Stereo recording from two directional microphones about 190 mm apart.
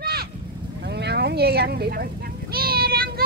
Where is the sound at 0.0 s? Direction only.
55° right (ahead or behind).